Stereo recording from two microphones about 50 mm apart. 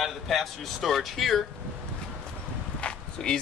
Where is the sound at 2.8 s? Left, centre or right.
Centre.